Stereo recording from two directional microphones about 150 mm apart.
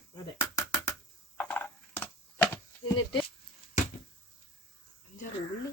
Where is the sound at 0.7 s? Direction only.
20° left (ahead or behind).